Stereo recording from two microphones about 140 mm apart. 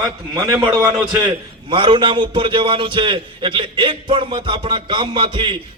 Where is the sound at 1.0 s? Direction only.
30° right (ahead or behind).